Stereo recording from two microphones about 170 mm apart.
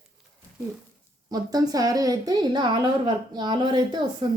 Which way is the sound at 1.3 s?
20° right (ahead or behind).